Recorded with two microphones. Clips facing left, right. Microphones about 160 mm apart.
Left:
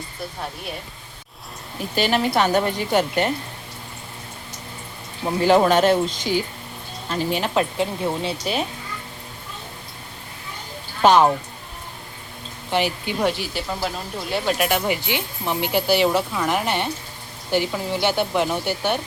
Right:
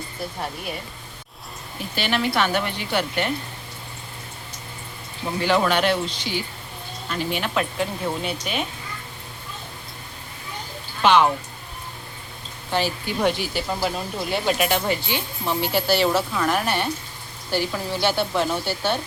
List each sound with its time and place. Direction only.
2.0 s a woman's voice: 40° left (ahead or behind)
5.4 s a woman's voice: 40° left (ahead or behind)
11.0 s speech: 40° left (ahead or behind)
12.7 s speech: 20° left (ahead or behind)
13.1 s speech: centre (ahead or behind)
14.7 s speech: 15° left (ahead or behind)